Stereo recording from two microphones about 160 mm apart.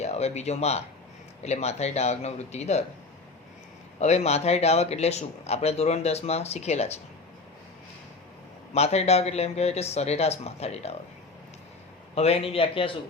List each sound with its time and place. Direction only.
0.0 s a man's voice: 45° left (ahead or behind)
4.0 s speech: 45° left (ahead or behind)
8.7 s speech: 40° left (ahead or behind)
12.1 s speech: 40° left (ahead or behind)